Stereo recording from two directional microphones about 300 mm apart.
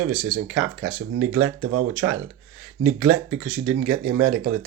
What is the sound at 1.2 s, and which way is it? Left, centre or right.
Speech, centre.